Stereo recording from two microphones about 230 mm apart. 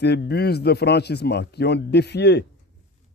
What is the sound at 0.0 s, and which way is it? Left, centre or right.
Speech, left.